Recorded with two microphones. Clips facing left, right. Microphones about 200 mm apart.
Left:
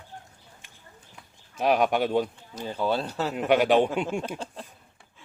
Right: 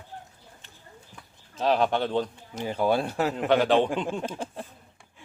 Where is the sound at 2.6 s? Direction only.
10° right (ahead or behind).